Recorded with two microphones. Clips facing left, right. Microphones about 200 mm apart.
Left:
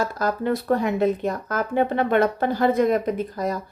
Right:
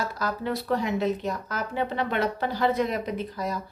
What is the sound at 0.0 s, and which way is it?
A woman's voice, 50° left (ahead or behind).